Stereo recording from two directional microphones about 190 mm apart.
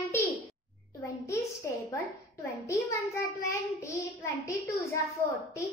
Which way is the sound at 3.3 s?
15° left (ahead or behind).